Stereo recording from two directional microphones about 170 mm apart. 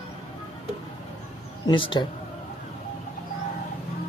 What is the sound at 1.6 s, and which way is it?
Speech, 30° left (ahead or behind).